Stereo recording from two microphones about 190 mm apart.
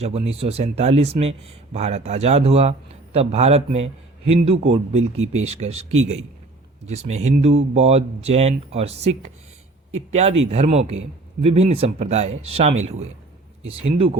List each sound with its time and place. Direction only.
0.0 s a man's voice: 35° right (ahead or behind)
6.8 s a man's voice: 35° right (ahead or behind)